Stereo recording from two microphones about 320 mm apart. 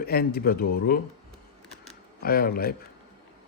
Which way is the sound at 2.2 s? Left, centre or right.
Left.